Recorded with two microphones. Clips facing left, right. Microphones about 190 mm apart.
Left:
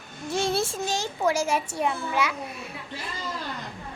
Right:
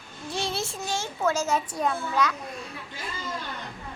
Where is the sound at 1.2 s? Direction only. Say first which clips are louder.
Left 1 dB; 10° left (ahead or behind).